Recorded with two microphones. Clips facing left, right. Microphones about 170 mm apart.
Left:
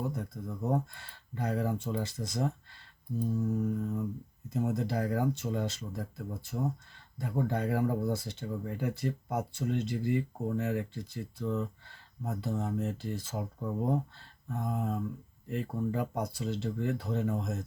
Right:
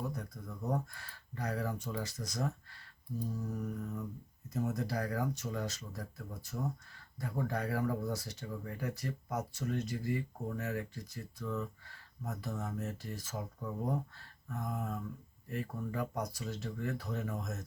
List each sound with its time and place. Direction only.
0.0 s speech: 25° left (ahead or behind)